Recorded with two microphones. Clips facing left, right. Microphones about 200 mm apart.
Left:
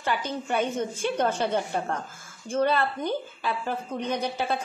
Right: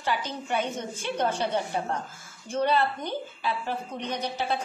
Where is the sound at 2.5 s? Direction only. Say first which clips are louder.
Left 1 dB; 50° left (ahead or behind).